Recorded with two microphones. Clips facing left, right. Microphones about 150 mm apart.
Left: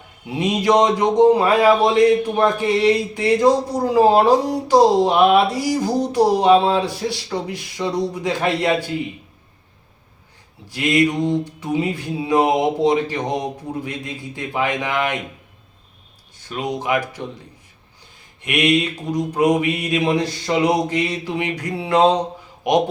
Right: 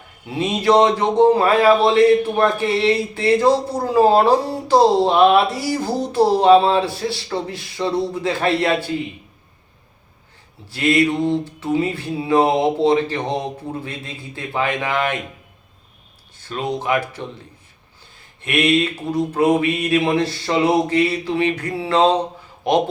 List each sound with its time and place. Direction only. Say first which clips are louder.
0.3 s a man's voice: even; 15° left (ahead or behind)
10.7 s a man's voice: right 1 dB; 15° left (ahead or behind)
16.5 s a man's voice: right 1 dB; 15° left (ahead or behind)
18.4 s a man's voice: right 1 dB; 15° left (ahead or behind)